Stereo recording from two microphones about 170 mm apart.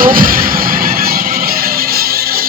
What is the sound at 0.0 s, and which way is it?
Music, 55° right (ahead or behind).